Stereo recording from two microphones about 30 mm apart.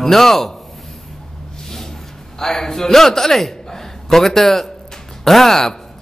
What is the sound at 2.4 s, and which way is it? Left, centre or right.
A man's voice, centre.